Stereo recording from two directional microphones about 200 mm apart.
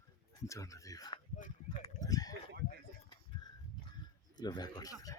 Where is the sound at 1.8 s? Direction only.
15° left (ahead or behind).